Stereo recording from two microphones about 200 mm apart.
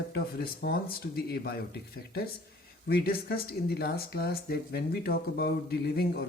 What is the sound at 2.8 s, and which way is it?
Speech, 50° left (ahead or behind).